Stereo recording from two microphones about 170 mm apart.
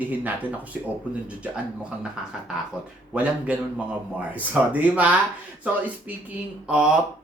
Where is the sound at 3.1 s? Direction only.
10° right (ahead or behind).